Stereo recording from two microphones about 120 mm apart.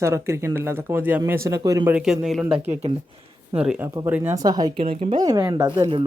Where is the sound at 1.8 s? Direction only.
5° right (ahead or behind).